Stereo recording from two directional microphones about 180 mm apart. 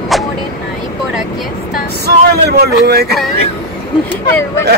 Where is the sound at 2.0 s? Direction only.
65° right (ahead or behind).